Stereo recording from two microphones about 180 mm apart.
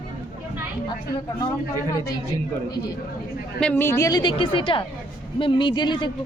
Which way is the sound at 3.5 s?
10° left (ahead or behind).